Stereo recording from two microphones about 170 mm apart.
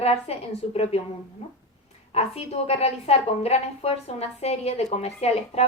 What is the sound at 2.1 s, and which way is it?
A woman's voice, 40° left (ahead or behind).